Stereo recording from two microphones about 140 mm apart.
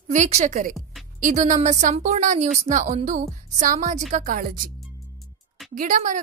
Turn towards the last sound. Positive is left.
turn(degrees=-65)  # may be behind; listen again after turning